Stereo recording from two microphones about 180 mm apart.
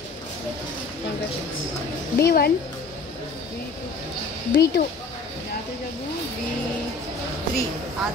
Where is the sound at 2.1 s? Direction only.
60° left (ahead or behind).